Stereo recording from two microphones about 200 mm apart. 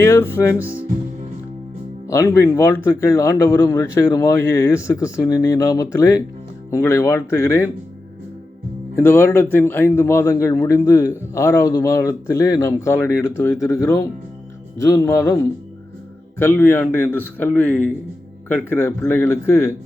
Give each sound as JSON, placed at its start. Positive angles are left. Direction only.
{"t": 0.0, "sound": "speech", "side_deg": 15}
{"t": 0.6, "sound": "speech", "side_deg": -10}
{"t": 2.0, "sound": "speech", "side_deg": 15}
{"t": 9.0, "sound": "speech", "side_deg": 10}
{"t": 16.4, "sound": "speech", "side_deg": 10}